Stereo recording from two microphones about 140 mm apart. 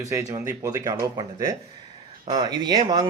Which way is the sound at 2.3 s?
30° right (ahead or behind).